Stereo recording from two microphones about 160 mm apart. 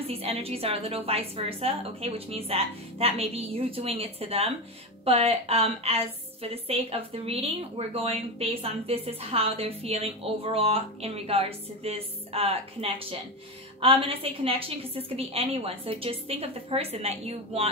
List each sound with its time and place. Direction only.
0.0 s a woman's voice: 40° right (ahead or behind)